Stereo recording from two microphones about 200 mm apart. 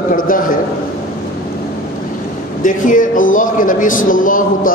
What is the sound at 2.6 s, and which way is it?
Speech, 40° left (ahead or behind).